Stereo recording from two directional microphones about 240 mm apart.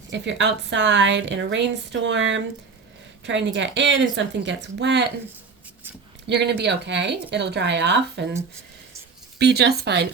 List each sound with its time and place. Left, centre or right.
0.1 s a woman's voice: right
6.2 s a woman's voice: right
9.4 s a woman's voice: right